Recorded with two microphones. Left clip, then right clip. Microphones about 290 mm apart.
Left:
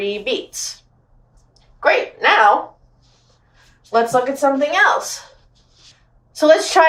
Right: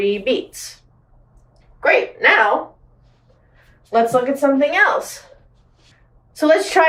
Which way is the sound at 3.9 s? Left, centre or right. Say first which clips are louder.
Even; centre.